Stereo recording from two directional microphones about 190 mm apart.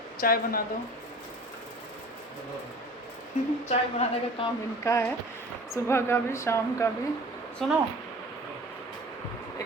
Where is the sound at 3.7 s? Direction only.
30° left (ahead or behind).